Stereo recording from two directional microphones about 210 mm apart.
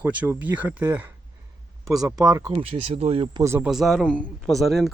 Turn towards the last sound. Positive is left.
turn(degrees=0)  # may be behind; listen again after turning